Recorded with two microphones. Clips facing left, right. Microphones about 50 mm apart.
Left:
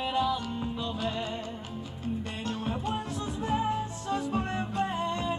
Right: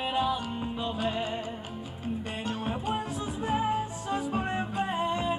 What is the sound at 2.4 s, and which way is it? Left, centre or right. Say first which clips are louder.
Music: right 1 dB; centre.